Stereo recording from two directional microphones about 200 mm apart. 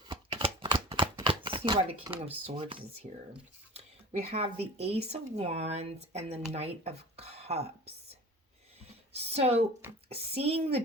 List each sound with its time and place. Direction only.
0.0 s shuffling cards: 25° right (ahead or behind)
0.9 s a sound: 25° right (ahead or behind)
2.2 s speech: 30° right (ahead or behind)
4.2 s speech: 30° right (ahead or behind)
9.1 s a woman's voice: 30° right (ahead or behind)